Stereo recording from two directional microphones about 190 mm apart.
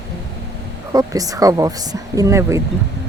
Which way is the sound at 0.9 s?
20° right (ahead or behind).